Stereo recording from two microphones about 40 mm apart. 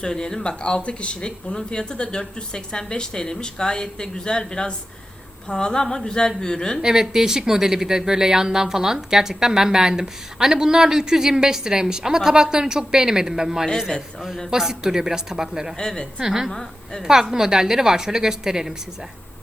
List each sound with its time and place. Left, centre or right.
0.0 s a woman's voice: centre
0.6 s a woman's voice: left
6.8 s speech: centre
15.8 s speech: centre
16.2 s speech: centre
16.5 s a woman's voice: centre
17.1 s speech: centre